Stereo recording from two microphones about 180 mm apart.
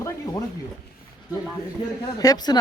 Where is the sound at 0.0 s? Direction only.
20° left (ahead or behind).